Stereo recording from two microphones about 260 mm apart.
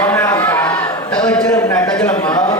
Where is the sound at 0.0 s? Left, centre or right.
Centre.